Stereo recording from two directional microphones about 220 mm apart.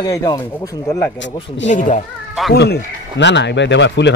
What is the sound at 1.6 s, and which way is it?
Speech, 35° left (ahead or behind).